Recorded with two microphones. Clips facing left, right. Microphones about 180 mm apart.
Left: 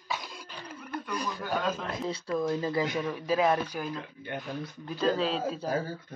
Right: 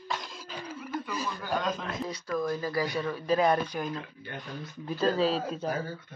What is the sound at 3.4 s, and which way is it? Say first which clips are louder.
Speech: even; 5° left (ahead or behind).